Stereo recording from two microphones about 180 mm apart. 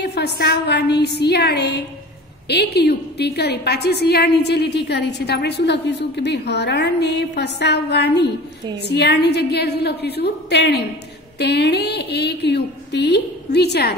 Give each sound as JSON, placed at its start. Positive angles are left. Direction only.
{"t": 0.0, "sound": "a woman's voice", "side_deg": 65}